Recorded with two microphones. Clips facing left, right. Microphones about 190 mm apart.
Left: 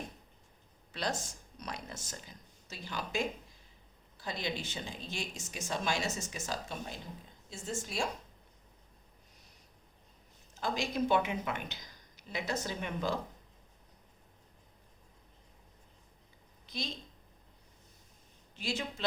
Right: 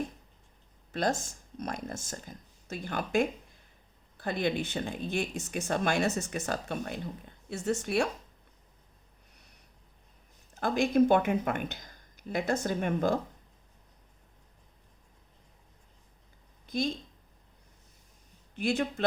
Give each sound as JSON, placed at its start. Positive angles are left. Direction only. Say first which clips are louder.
{"t": 1.2, "sound": "a woman's voice", "louder": "right 7 dB", "side_deg": -50}
{"t": 10.5, "sound": "speech", "louder": "right 8 dB", "side_deg": -55}
{"t": 16.6, "sound": "speech", "louder": "right 11 dB", "side_deg": -50}
{"t": 18.5, "sound": "speech", "louder": "right 8 dB", "side_deg": -55}